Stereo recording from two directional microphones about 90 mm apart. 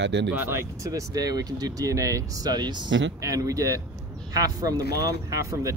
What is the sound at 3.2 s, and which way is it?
Speech, 40° right (ahead or behind).